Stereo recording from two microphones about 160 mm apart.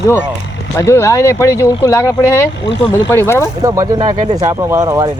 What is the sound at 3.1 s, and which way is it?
Speech, 15° left (ahead or behind).